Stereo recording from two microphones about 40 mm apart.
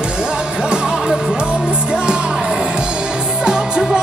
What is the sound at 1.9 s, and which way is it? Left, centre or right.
Music, right.